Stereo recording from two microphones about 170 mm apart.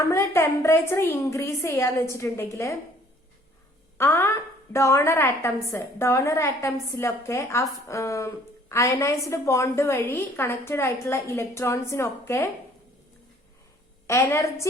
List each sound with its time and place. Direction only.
0.1 s a woman's voice: 15° left (ahead or behind)
3.9 s a woman's voice: 15° left (ahead or behind)
14.1 s a woman's voice: 15° left (ahead or behind)